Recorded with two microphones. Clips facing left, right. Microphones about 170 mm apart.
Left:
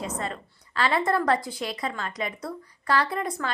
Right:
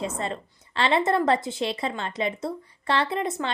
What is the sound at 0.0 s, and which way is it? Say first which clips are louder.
A woman's voice: right 2 dB; 25° right (ahead or behind).